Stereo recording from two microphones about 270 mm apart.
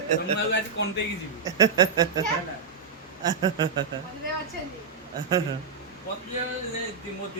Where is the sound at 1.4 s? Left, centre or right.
Centre.